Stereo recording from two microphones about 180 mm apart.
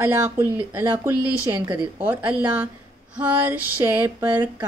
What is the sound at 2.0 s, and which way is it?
Speech, 10° right (ahead or behind).